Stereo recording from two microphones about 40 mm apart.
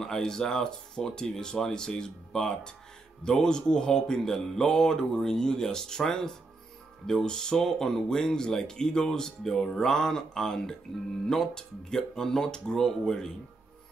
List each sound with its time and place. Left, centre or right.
0.0 s speech: centre